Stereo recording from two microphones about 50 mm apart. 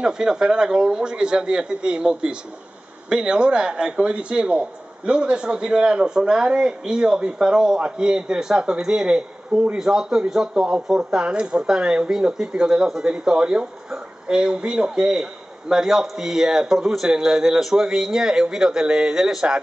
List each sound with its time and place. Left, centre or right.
0.0 s a man's voice: centre